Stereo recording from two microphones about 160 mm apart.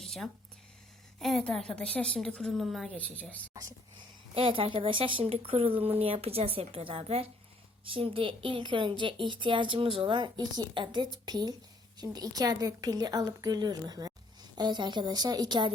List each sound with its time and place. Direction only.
0.0 s a sound: centre (ahead or behind)
1.2 s a woman's voice: centre (ahead or behind)
4.4 s a woman's voice: 35° right (ahead or behind)